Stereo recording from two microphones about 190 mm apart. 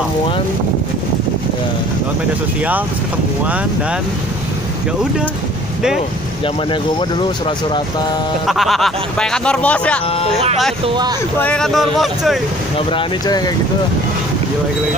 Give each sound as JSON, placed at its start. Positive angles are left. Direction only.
{"t": 6.4, "sound": "speech", "side_deg": 25}
{"t": 8.5, "sound": "speech", "side_deg": 0}
{"t": 12.7, "sound": "speech", "side_deg": 25}